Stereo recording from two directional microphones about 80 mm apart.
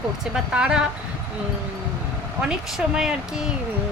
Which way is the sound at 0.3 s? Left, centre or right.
Centre.